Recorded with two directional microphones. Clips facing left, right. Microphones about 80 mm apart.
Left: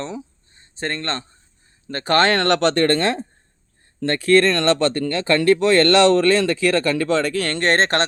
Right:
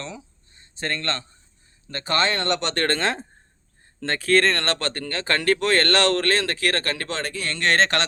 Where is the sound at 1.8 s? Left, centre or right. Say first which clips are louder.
Left 6 dB; left.